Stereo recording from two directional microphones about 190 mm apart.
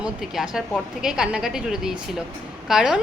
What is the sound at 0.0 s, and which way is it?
A woman's voice, 5° right (ahead or behind).